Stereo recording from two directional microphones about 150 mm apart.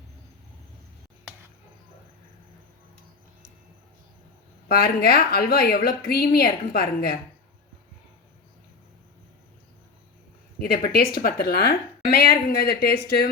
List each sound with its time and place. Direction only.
4.7 s a woman's voice: 90° left
10.6 s a woman's voice: 90° left